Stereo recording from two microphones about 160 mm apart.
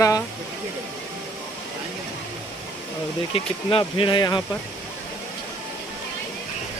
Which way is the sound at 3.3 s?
35° left (ahead or behind).